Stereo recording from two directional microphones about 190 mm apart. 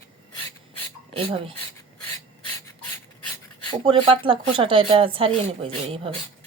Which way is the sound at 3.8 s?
30° right (ahead or behind).